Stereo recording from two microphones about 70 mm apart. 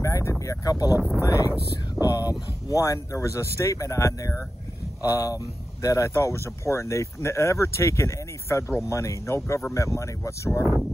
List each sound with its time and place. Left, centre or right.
0.0 s a sound: left
1.2 s speech: left
5.0 s speech: left